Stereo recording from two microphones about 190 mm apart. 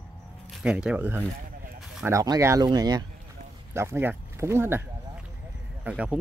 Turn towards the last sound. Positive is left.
turn(degrees=-5)  # may be behind; listen again after turning